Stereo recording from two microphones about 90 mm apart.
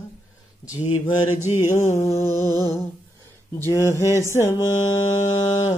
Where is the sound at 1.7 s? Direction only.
35° left (ahead or behind).